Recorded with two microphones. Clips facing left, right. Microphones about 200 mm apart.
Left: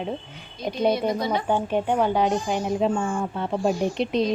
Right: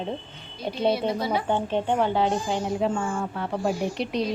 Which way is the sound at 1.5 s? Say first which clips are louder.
Left 3 dB; 10° left (ahead or behind).